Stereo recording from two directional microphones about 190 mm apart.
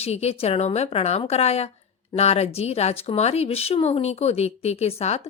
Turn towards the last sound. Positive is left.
turn(degrees=35)  # may be behind; listen again after turning